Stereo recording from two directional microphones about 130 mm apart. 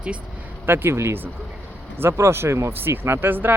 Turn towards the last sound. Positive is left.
turn(degrees=-15)  # may be behind; listen again after turning